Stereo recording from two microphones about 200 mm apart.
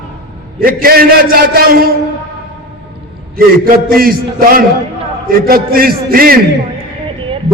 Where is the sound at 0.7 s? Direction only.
50° right (ahead or behind).